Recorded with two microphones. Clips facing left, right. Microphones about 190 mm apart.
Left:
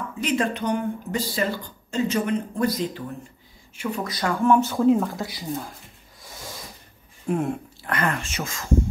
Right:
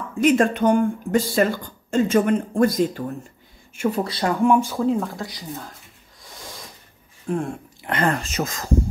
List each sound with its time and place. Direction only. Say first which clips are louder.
0.1 s speech: right 8 dB; 50° right (ahead or behind)
4.0 s speech: right 3 dB; 30° right (ahead or behind)
4.4 s speech: right 1 dB; 10° right (ahead or behind)
4.7 s speech: left 3 dB; 5° left (ahead or behind)
6.3 s a sound: left 1 dB; 5° left (ahead or behind)
7.2 s speech: left 1 dB; 5° left (ahead or behind)
7.8 s speech: right 4 dB; 30° right (ahead or behind)